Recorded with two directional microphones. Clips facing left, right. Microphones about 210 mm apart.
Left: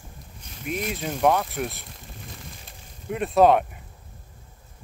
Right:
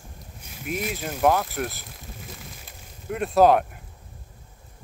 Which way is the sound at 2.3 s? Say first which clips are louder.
Even; centre (ahead or behind).